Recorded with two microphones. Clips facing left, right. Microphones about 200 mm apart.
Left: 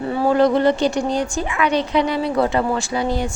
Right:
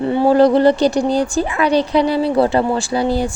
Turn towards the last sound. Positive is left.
turn(degrees=-35)  # may be behind; listen again after turning